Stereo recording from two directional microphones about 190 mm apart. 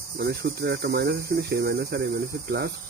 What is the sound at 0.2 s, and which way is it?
Cricket, 55° right (ahead or behind).